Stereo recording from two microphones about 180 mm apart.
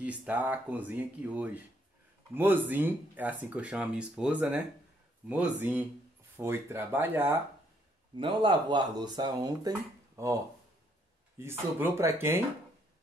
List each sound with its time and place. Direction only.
0.0 s speech: 5° right (ahead or behind)
8.2 s speech: 25° right (ahead or behind)